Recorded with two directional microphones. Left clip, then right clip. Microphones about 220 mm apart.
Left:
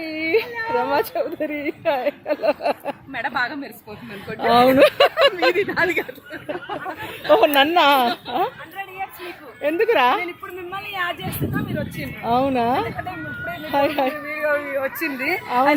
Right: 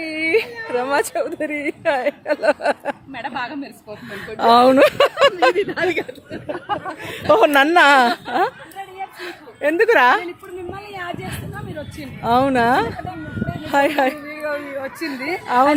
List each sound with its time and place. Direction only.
0.0 s a woman's voice: 10° right (ahead or behind); by 6.4 s 25° right (ahead or behind)
6.5 s speech: 40° right (ahead or behind); by 10.2 s 15° right (ahead or behind)
10.8 s speech: 5° left (ahead or behind)
12.2 s speech: 15° right (ahead or behind)
14.3 s speech: centre (ahead or behind); by 15.7 s 15° right (ahead or behind)